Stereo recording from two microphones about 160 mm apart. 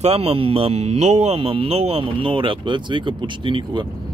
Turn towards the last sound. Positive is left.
turn(degrees=-30)  # may be behind; listen again after turning